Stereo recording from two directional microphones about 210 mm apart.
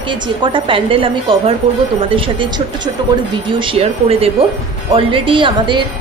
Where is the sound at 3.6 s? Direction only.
25° right (ahead or behind).